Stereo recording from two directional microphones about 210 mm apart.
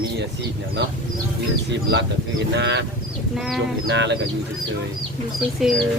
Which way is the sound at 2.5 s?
55° right (ahead or behind).